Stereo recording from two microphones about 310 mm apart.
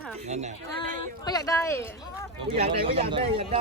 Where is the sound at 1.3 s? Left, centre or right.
Centre.